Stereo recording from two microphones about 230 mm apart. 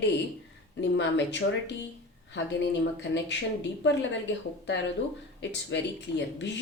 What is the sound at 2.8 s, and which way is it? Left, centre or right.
Speech, left.